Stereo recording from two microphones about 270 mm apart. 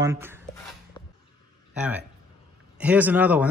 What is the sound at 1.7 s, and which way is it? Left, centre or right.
Speech, centre.